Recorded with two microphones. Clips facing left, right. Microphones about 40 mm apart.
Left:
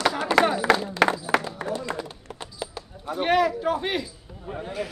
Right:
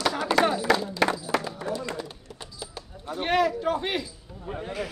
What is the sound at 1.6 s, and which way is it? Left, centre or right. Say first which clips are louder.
Run: left 2 dB; left.